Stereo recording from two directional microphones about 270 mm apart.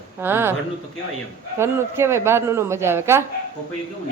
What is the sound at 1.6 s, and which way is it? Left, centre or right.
Speech, centre.